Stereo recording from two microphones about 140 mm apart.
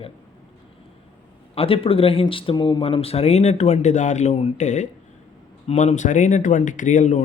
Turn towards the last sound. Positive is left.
turn(degrees=60)  # may be behind; listen again after turning